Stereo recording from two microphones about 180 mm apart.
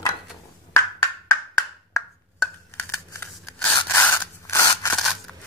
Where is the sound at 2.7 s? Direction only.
15° left (ahead or behind).